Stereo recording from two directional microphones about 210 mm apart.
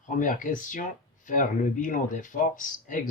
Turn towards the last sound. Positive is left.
turn(degrees=40)  # may be behind; listen again after turning